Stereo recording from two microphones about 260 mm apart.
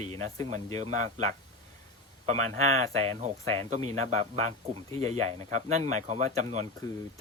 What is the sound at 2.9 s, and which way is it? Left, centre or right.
Speech, right.